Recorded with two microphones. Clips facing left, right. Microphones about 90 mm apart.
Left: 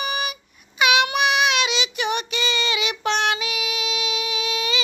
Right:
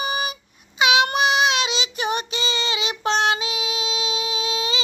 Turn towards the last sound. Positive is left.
turn(degrees=-30)  # may be behind; listen again after turning